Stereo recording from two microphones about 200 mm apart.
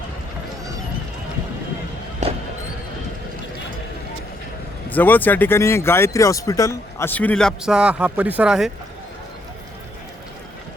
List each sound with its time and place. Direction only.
4.9 s speech: 10° left (ahead or behind)